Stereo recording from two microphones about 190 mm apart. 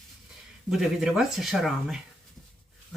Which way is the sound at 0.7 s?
Centre (ahead or behind).